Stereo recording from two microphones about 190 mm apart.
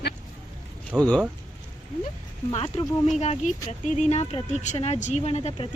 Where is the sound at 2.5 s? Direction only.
30° left (ahead or behind).